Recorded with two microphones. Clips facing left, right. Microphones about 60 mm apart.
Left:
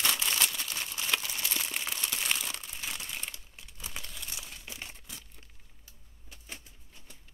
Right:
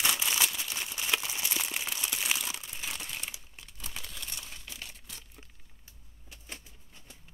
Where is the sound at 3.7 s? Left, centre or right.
Centre.